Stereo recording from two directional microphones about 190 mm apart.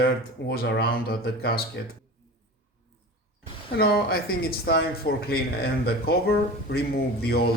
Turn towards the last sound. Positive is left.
turn(degrees=55)  # may be behind; listen again after turning